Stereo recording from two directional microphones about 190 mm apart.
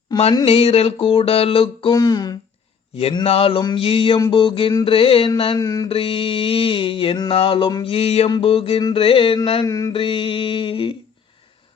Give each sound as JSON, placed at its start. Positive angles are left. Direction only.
{"t": 0.4, "sound": "mantra", "side_deg": 30}
{"t": 3.0, "sound": "mantra", "side_deg": 30}
{"t": 5.5, "sound": "mantra", "side_deg": 20}
{"t": 5.9, "sound": "mantra", "side_deg": 30}
{"t": 9.6, "sound": "mantra", "side_deg": 15}
{"t": 9.9, "sound": "mantra", "side_deg": 25}